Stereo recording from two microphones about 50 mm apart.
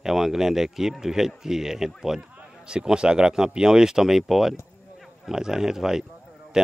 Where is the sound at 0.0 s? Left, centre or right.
Centre.